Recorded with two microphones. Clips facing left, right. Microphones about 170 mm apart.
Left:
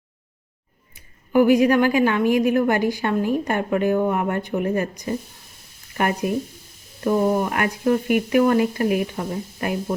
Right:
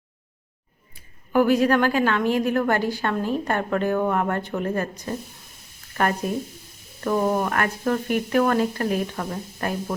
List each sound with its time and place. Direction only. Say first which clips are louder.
0.9 s speech: left 3 dB; 15° left (ahead or behind)
6.2 s speech: left 3 dB; 10° left (ahead or behind)